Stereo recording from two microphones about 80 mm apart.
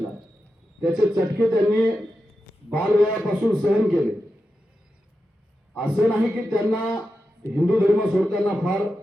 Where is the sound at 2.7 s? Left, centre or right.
Centre.